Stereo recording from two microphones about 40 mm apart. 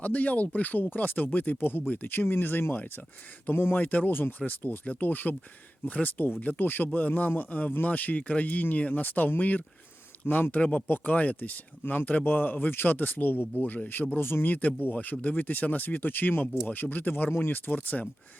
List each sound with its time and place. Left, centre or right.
0.0 s speech: left
1.5 s speech: left
3.8 s speech: left
10.8 s speech: left
11.1 s speech: left
14.2 s speech: left
14.4 s speech: left